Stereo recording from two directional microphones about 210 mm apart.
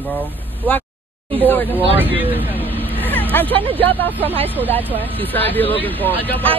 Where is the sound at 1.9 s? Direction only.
10° right (ahead or behind).